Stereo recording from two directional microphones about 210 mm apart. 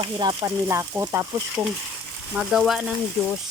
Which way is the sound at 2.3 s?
5° right (ahead or behind).